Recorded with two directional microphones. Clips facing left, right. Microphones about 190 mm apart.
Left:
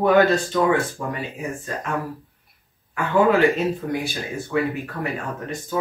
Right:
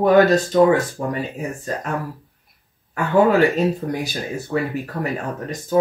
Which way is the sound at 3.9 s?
40° right (ahead or behind).